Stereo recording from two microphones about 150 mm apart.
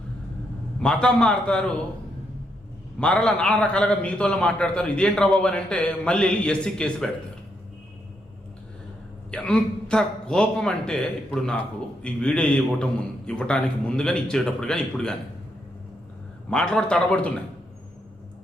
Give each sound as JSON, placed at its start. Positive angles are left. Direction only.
{"t": 0.8, "sound": "a man's voice", "side_deg": 5}
{"t": 3.0, "sound": "a man's voice", "side_deg": 5}
{"t": 9.3, "sound": "a man's voice", "side_deg": 5}
{"t": 16.5, "sound": "a man's voice", "side_deg": 5}